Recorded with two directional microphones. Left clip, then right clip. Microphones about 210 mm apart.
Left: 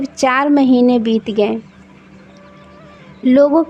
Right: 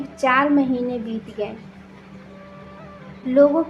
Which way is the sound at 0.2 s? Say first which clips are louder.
Left 4 dB; 50° left (ahead or behind).